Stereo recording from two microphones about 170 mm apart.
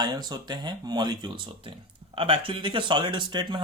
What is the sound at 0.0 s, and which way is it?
Speech, 25° right (ahead or behind).